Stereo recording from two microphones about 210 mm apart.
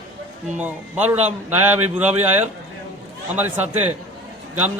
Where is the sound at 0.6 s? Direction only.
10° right (ahead or behind).